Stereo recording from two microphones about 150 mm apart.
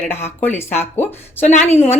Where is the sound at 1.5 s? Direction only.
50° left (ahead or behind).